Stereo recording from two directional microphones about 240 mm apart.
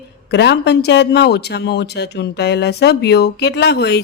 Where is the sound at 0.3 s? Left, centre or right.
Left.